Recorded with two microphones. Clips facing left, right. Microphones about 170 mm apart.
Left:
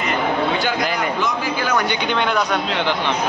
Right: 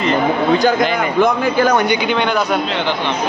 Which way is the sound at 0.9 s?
55° right (ahead or behind).